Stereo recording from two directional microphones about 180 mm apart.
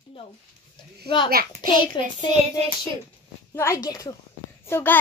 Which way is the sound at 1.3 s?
55° right (ahead or behind).